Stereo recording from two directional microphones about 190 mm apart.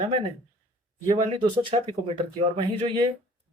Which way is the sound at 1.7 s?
35° right (ahead or behind).